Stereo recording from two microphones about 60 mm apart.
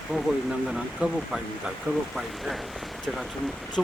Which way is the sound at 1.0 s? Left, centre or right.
Right.